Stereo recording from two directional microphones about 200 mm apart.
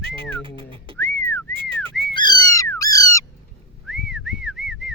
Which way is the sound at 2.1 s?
20° left (ahead or behind).